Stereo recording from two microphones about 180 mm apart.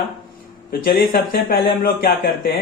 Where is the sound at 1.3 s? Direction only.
55° left (ahead or behind).